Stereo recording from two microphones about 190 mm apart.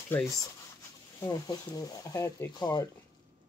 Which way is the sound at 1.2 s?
20° left (ahead or behind).